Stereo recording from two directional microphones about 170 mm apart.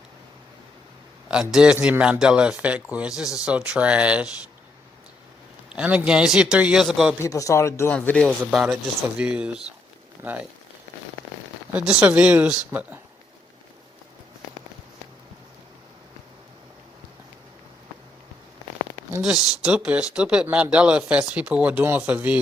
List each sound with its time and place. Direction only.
1.3 s a man's voice: 5° right (ahead or behind)
5.6 s a man's voice: 5° right (ahead or behind)
7.2 s a man's voice: 20° left (ahead or behind)
8.4 s speech: 5° right (ahead or behind)
11.7 s speech: 10° right (ahead or behind)
19.2 s speech: 5° right (ahead or behind)